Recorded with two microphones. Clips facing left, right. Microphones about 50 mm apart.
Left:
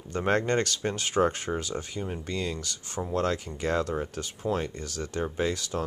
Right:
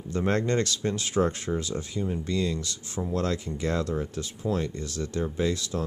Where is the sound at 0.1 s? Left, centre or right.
Left.